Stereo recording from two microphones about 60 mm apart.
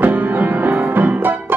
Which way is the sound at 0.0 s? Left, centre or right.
Right.